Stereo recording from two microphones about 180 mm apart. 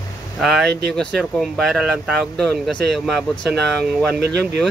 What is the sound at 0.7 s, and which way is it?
Speech, 70° right (ahead or behind).